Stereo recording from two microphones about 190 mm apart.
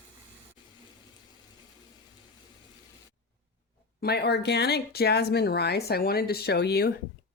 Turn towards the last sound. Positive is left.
turn(degrees=60)  # may be behind; listen again after turning